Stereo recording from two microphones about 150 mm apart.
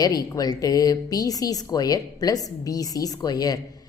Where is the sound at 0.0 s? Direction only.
25° left (ahead or behind).